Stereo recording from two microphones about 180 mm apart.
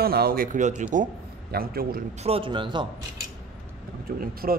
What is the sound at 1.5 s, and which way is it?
Speech, 55° right (ahead or behind).